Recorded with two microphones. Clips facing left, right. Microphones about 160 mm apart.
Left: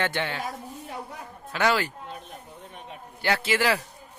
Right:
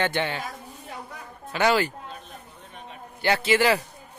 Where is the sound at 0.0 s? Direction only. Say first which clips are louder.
Right 2 dB; centre (ahead or behind).